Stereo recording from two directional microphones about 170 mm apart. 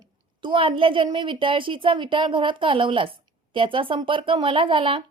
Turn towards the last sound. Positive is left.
turn(degrees=-30)  # may be behind; listen again after turning